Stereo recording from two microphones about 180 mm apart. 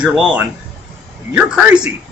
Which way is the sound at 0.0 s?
5° right (ahead or behind).